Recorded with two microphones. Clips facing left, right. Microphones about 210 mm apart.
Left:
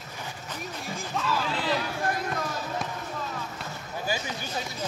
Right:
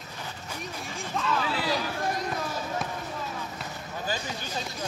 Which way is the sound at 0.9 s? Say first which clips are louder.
Even; centre (ahead or behind).